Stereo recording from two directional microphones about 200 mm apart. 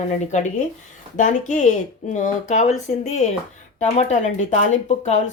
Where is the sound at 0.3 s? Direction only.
35° left (ahead or behind).